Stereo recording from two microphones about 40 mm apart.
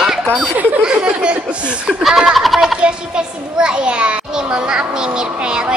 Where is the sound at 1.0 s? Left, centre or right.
Right.